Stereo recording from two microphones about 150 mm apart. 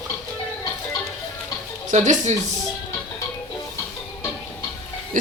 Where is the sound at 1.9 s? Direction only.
55° right (ahead or behind).